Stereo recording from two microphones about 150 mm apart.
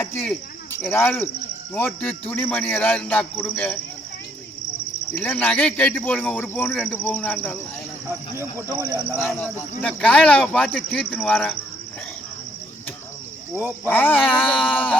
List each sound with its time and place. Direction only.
0.8 s speech: 15° left (ahead or behind)
5.1 s speech: 10° left (ahead or behind)
8.6 s speech: 15° left (ahead or behind)
13.8 s speech: 10° left (ahead or behind)